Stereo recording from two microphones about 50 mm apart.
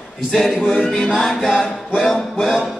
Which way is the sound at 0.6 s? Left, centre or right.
Left.